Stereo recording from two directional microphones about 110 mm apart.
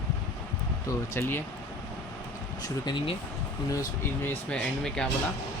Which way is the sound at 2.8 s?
45° left (ahead or behind).